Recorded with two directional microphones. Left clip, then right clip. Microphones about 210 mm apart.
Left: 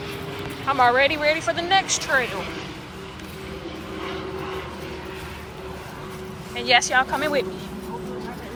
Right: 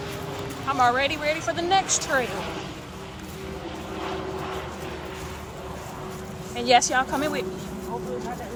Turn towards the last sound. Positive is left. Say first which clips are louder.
# left 4 dB
turn(degrees=-20)  # may be behind; listen again after turning